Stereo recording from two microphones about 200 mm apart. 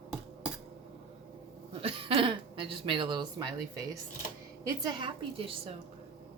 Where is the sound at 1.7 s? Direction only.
30° right (ahead or behind).